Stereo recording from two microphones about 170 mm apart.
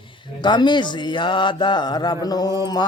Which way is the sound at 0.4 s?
25° left (ahead or behind).